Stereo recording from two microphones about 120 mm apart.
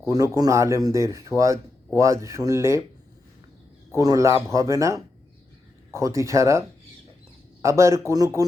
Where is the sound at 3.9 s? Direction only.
30° right (ahead or behind).